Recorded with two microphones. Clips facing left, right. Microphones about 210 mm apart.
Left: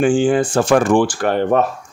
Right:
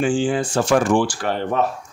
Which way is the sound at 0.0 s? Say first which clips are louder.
Left 5 dB; 50° left (ahead or behind).